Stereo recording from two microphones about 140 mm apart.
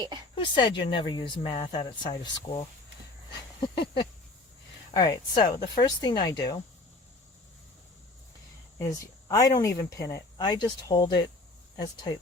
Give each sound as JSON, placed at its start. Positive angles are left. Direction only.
{"t": 0.3, "sound": "speech", "side_deg": 35}
{"t": 3.6, "sound": "speech", "side_deg": 35}
{"t": 8.8, "sound": "speech", "side_deg": 25}